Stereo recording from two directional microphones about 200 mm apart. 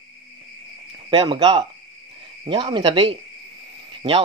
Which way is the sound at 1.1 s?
25° right (ahead or behind).